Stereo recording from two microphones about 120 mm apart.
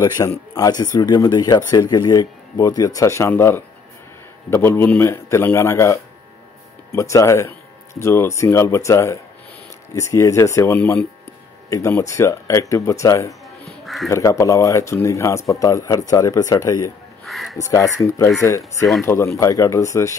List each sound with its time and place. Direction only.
0.0 s speech: 30° left (ahead or behind)
12.0 s speech: 25° left (ahead or behind)
13.8 s speech: centre (ahead or behind)
14.1 s speech: 25° left (ahead or behind)
17.3 s speech: centre (ahead or behind)
17.6 s speech: 25° left (ahead or behind)